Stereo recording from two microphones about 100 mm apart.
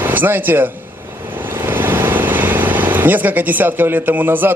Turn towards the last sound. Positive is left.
turn(degrees=-20)  # may be behind; listen again after turning